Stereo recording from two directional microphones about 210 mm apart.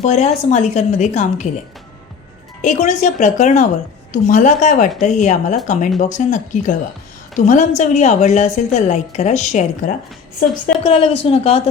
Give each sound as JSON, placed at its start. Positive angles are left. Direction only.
{"t": 0.0, "sound": "a woman's voice", "side_deg": 35}
{"t": 2.6, "sound": "a woman's voice", "side_deg": 35}